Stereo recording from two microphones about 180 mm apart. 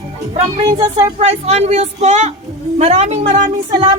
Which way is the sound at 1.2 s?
35° right (ahead or behind).